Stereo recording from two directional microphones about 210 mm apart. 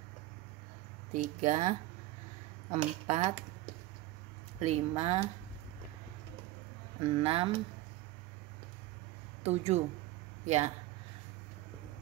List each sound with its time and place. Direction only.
1.1 s speech: 35° right (ahead or behind)
4.6 s speech: 30° right (ahead or behind)
7.2 s speech: 25° right (ahead or behind)
9.4 s speech: 30° right (ahead or behind)